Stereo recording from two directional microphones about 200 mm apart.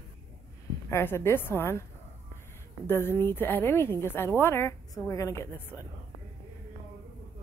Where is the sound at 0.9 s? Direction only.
15° left (ahead or behind).